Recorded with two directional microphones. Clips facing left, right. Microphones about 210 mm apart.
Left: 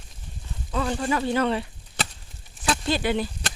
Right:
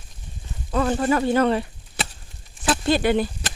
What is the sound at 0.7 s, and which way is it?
Speech, 50° right (ahead or behind).